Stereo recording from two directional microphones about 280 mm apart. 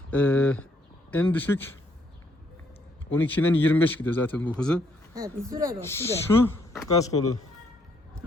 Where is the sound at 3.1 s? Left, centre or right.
Centre.